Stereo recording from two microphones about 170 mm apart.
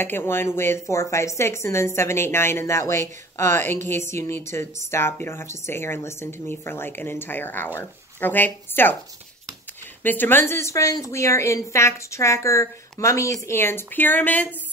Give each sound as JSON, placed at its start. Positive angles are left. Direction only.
{"t": 0.0, "sound": "speech", "side_deg": 10}
{"t": 10.0, "sound": "speech", "side_deg": 10}